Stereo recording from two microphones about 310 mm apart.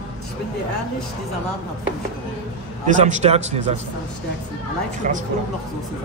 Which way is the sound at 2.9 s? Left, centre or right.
Right.